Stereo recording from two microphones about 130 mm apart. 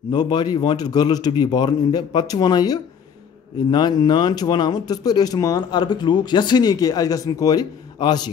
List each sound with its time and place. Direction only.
0.1 s speech: 35° left (ahead or behind)